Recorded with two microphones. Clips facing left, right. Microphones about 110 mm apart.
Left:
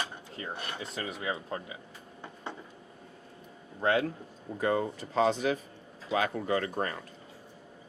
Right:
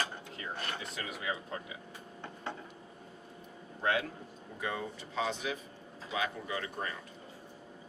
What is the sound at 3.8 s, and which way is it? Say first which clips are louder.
Speech: left 5 dB; 35° left (ahead or behind).